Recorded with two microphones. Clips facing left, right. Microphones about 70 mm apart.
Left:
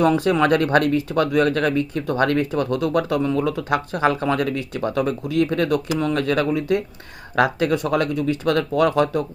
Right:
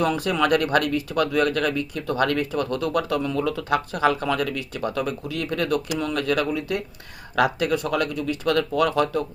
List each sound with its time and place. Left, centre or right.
0.0 s speech: left